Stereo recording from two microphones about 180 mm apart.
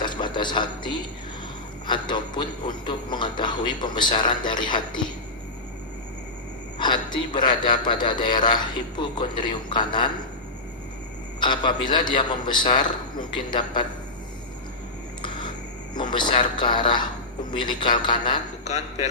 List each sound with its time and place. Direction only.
0.0 s a sound: 25° left (ahead or behind)
1.9 s a man's voice: 25° left (ahead or behind)
6.7 s a man's voice: 25° left (ahead or behind)
11.3 s a man's voice: 25° left (ahead or behind)
15.2 s a sound: 25° left (ahead or behind)
16.0 s a man's voice: 25° left (ahead or behind)
18.6 s a man's voice: 40° left (ahead or behind)